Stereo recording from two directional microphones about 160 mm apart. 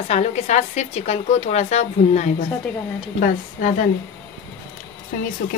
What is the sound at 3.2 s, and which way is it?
Stir, 55° left (ahead or behind).